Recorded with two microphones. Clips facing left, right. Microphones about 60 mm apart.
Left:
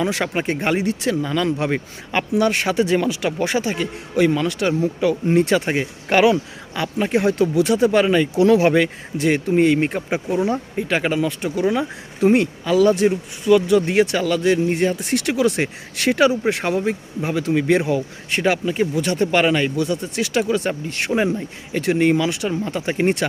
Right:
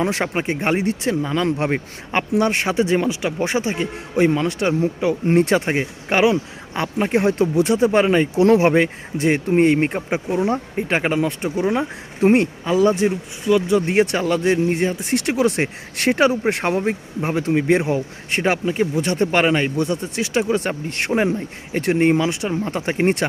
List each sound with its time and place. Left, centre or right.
0.0 s speech: right
0.3 s speech: centre
1.5 s speech: right
5.2 s speech: right
5.8 s speech: centre
6.7 s speech: right
14.8 s speech: right
20.7 s speech: right